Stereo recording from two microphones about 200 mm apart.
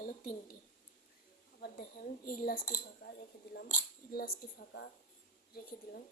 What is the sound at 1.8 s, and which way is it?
A woman's voice, 45° left (ahead or behind).